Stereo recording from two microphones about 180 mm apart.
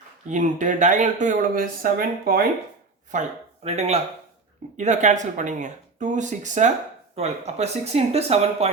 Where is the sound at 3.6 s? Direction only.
35° right (ahead or behind).